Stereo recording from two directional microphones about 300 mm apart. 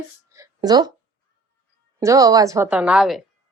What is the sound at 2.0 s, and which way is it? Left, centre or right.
A woman's voice, centre.